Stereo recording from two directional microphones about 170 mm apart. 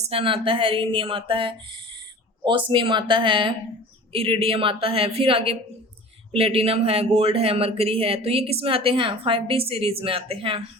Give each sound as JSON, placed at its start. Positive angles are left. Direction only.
{"t": 0.0, "sound": "speech", "side_deg": -35}